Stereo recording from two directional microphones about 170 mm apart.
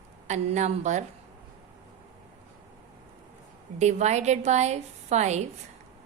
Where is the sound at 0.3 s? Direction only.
45° right (ahead or behind).